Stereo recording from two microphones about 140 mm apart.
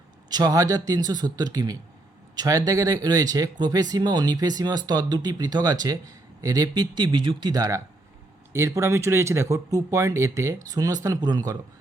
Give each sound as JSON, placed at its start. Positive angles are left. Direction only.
{"t": 0.3, "sound": "speech", "side_deg": -25}